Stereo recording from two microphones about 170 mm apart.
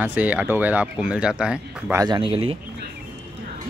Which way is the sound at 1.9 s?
25° right (ahead or behind).